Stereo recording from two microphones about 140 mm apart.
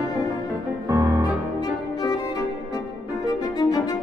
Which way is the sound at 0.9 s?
25° right (ahead or behind).